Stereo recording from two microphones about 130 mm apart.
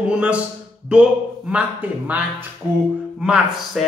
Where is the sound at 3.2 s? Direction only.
5° right (ahead or behind).